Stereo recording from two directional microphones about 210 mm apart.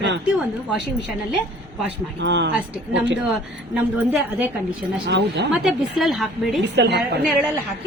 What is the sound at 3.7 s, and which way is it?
Speech, 5° right (ahead or behind).